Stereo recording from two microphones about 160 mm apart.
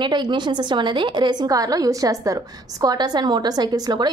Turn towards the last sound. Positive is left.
turn(degrees=-25)  # may be behind; listen again after turning